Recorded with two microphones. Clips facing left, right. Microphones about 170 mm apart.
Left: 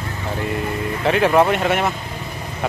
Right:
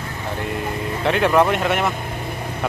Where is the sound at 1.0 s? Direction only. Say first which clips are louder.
Left 1 dB; centre (ahead or behind).